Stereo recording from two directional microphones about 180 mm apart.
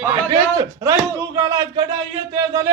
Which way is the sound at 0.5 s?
20° right (ahead or behind).